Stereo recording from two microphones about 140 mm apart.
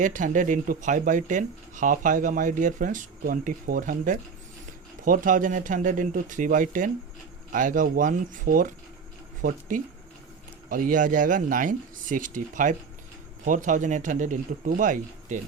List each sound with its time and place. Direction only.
0.0 s speech: 65° right (ahead or behind)